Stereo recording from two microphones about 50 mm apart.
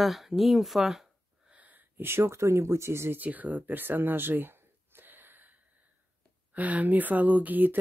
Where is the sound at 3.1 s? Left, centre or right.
Right.